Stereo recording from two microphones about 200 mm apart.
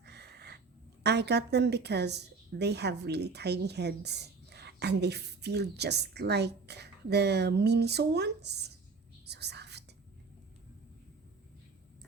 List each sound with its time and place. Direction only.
0.0 s a sound: 55° right (ahead or behind)
1.0 s a woman's voice: 55° right (ahead or behind)
9.2 s whispering: 55° right (ahead or behind)